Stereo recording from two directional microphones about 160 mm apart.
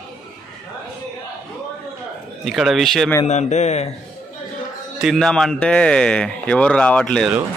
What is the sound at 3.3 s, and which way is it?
Speech, 45° left (ahead or behind).